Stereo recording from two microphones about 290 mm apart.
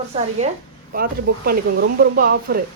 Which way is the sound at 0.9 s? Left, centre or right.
Right.